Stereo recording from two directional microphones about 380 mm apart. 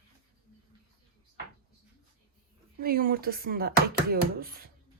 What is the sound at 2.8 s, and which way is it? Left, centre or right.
Speech, right.